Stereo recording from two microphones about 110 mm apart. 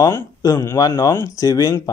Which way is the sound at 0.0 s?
30° left (ahead or behind).